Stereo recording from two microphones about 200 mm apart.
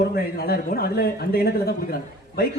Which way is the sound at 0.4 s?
50° left (ahead or behind).